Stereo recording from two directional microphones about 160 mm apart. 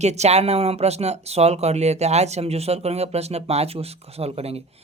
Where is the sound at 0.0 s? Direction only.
45° right (ahead or behind).